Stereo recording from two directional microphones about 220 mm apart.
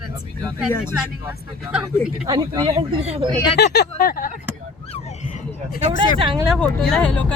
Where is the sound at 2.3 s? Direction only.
15° right (ahead or behind).